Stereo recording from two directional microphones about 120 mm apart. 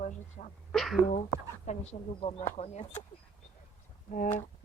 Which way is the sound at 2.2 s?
55° left (ahead or behind).